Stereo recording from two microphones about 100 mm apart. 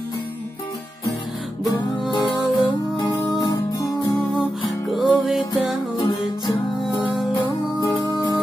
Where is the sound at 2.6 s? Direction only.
45° left (ahead or behind).